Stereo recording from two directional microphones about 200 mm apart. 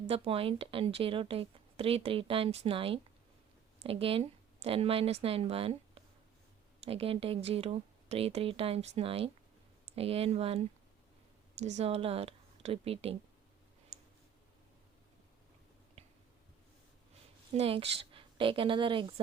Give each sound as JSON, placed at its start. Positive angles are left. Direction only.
{"t": 0.1, "sound": "a woman's voice", "side_deg": -30}
{"t": 13.9, "sound": "clicking", "side_deg": -35}
{"t": 16.0, "sound": "squish", "side_deg": -30}
{"t": 17.6, "sound": "a woman's voice", "side_deg": -30}